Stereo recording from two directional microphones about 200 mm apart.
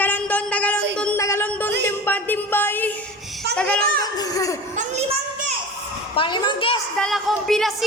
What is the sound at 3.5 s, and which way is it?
Speech, 5° left (ahead or behind).